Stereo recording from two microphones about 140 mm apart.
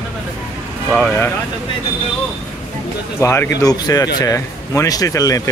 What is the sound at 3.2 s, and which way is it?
A man's voice, 20° left (ahead or behind).